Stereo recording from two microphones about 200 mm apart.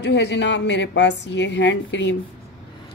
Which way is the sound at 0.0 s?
60° left (ahead or behind).